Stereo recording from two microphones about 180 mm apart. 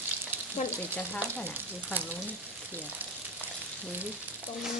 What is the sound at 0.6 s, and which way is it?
Stir, 35° left (ahead or behind).